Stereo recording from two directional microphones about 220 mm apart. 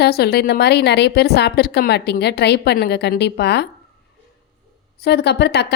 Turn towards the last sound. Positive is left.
turn(degrees=50)  # may be behind; listen again after turning